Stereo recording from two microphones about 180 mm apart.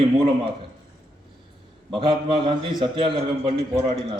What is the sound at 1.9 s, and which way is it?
A man's voice, 30° right (ahead or behind).